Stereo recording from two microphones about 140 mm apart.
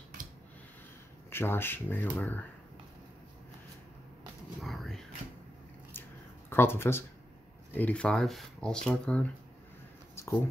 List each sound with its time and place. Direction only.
1.3 s speech: 15° left (ahead or behind)
4.6 s a sound: centre (ahead or behind)
6.5 s speech: 15° left (ahead or behind)